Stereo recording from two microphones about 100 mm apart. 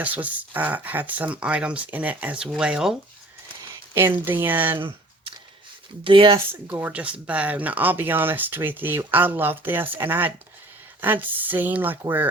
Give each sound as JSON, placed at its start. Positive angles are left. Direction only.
{"t": 0.0, "sound": "speech", "side_deg": -15}
{"t": 3.9, "sound": "speech", "side_deg": -20}
{"t": 4.8, "sound": "clicking", "side_deg": -60}
{"t": 6.1, "sound": "speech", "side_deg": -55}
{"t": 6.5, "sound": "speech", "side_deg": -20}